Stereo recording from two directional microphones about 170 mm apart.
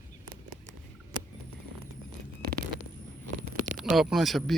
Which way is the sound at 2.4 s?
60° right (ahead or behind).